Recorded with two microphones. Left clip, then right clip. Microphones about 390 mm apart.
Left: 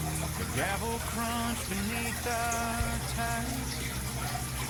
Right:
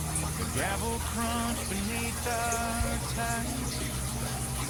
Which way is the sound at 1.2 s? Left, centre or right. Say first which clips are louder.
Right 2 dB; centre.